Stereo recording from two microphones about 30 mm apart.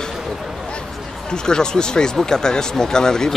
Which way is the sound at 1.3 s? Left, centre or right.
Left.